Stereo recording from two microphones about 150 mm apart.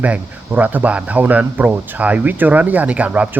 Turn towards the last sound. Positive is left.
turn(degrees=-10)  # may be behind; listen again after turning